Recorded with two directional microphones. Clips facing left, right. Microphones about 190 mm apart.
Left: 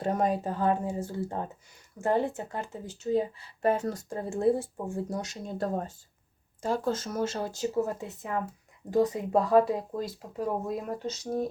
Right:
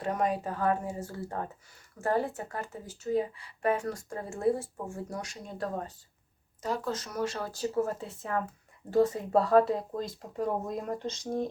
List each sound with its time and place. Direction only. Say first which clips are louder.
0.0 s speech: left 2 dB; 30° left (ahead or behind); by 11.4 s 5° left (ahead or behind)